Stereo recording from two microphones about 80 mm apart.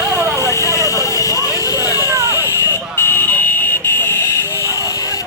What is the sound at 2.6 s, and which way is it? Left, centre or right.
Buzzer, left.